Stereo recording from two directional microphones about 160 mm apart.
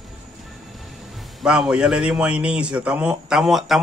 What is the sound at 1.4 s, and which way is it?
Speech, 5° right (ahead or behind).